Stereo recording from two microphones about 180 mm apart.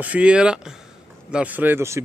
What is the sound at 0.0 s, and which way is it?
A man's voice, 5° right (ahead or behind).